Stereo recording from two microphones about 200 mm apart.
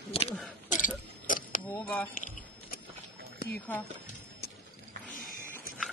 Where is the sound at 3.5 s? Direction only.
10° left (ahead or behind).